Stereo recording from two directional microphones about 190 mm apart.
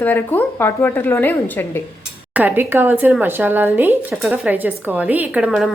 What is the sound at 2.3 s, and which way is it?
A woman's voice, 10° right (ahead or behind).